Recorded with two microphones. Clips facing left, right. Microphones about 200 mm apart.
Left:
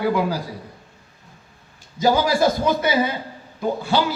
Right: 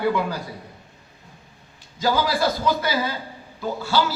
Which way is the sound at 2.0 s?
20° left (ahead or behind).